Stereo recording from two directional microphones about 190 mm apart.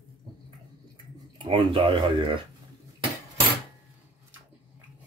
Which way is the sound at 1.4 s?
25° right (ahead or behind).